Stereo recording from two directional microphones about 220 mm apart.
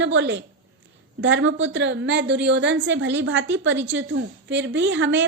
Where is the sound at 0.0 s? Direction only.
55° right (ahead or behind).